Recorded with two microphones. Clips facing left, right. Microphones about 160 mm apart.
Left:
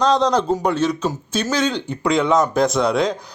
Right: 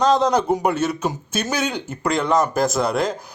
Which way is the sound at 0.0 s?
5° right (ahead or behind).